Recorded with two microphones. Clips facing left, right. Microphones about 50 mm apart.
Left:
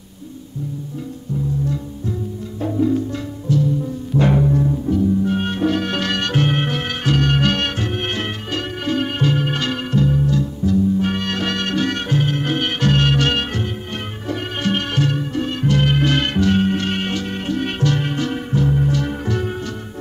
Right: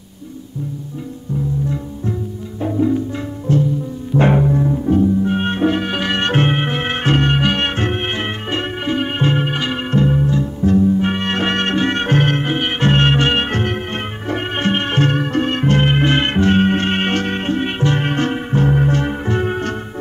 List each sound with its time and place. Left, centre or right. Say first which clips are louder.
2.6 s music: right 1 dB; centre
3.5 s music: right 2 dB; right
4.2 s music: right 2 dB; right
6.2 s music: right 4 dB; right
6.5 s music: right 2 dB; right
9.5 s music: right 1 dB; centre
9.8 s music: right 2 dB; right
12.1 s music: right 4 dB; right
12.4 s music: right 2 dB; right
13.5 s music: right 5 dB; right
14.3 s music: right 3 dB; right
17.6 s music: right 2 dB; right
18.0 s music: right 4 dB; right